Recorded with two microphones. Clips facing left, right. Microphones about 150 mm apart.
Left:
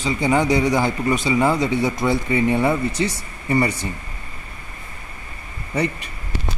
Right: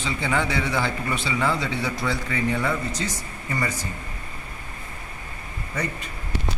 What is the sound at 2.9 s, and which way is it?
Speech, 60° left (ahead or behind).